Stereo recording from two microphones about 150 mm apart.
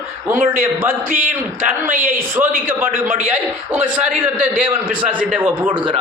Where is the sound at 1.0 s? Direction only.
65° right (ahead or behind).